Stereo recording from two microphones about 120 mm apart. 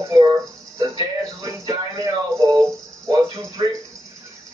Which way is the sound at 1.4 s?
25° right (ahead or behind).